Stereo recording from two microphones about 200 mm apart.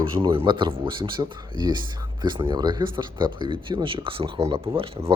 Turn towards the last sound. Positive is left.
turn(degrees=-25)  # may be behind; listen again after turning